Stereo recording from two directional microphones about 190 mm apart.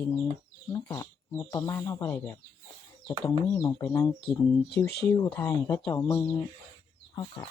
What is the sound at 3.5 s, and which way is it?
Speech, 20° left (ahead or behind).